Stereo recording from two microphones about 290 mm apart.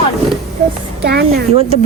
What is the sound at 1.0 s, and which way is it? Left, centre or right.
Speech, right.